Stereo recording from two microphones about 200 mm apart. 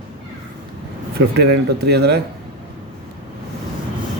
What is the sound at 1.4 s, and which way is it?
Speech, 55° right (ahead or behind).